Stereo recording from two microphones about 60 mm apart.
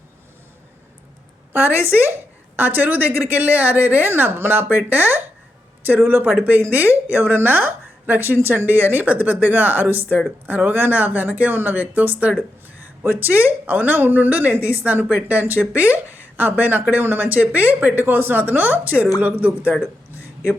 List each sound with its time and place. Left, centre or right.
1.5 s a woman's voice: right
18.0 s a woman's voice: right